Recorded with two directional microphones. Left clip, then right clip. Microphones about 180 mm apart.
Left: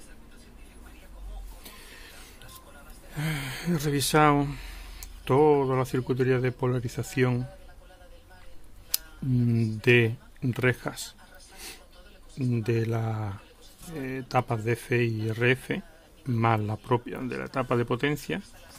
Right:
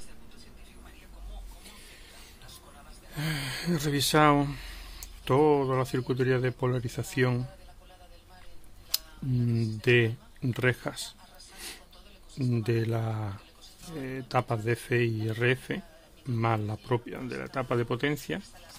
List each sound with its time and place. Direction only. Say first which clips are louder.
3.1 s speech: even; 5° left (ahead or behind)
8.9 s speech: left 2 dB; 10° left (ahead or behind)
11.5 s a sound: right 1 dB; centre (ahead or behind)
12.4 s a man's voice: left 1 dB; 5° right (ahead or behind)